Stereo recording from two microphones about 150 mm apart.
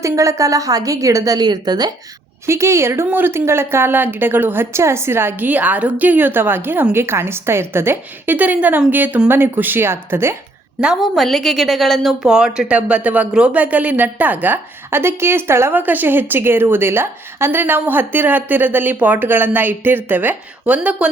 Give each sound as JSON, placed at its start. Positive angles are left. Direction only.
{"t": 0.0, "sound": "a woman's voice", "side_deg": -20}
{"t": 10.8, "sound": "a woman's voice", "side_deg": 0}